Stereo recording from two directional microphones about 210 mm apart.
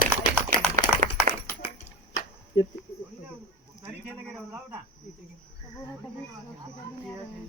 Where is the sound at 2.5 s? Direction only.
65° left (ahead or behind).